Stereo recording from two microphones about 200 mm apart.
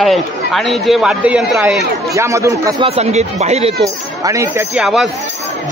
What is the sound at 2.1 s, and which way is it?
Speech, 15° right (ahead or behind).